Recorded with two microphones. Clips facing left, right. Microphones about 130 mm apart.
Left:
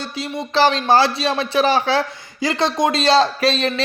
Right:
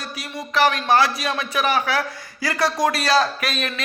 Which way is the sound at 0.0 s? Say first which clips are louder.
Left 6 dB; 25° left (ahead or behind).